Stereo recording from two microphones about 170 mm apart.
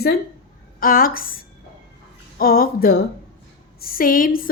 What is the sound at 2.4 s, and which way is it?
A woman's voice, 60° left (ahead or behind).